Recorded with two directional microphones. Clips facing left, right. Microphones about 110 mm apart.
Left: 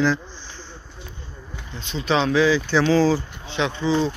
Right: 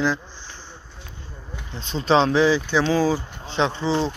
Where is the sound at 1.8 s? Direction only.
40° right (ahead or behind); by 3.2 s 15° right (ahead or behind).